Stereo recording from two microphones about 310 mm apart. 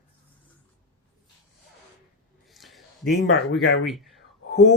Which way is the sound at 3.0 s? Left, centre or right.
Left.